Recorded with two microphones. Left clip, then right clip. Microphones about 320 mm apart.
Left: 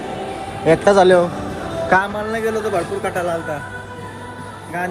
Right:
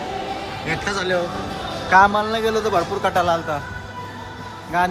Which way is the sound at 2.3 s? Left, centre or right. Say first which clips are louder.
Even; centre.